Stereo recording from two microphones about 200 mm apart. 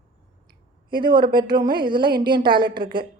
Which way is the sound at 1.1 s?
20° right (ahead or behind).